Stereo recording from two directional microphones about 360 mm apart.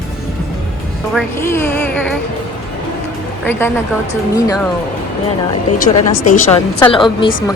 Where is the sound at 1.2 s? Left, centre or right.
Centre.